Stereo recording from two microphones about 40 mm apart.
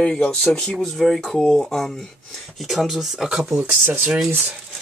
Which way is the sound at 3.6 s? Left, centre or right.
Right.